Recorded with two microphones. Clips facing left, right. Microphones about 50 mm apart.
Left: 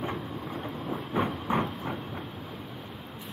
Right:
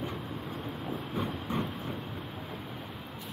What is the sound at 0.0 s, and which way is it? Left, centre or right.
Train, left.